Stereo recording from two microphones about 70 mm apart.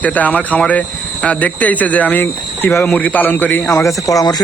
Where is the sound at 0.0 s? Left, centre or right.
Left.